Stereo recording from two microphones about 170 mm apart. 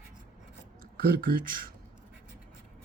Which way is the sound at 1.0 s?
60° right (ahead or behind).